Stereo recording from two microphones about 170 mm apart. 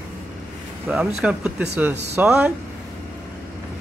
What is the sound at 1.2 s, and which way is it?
Speech, 5° right (ahead or behind).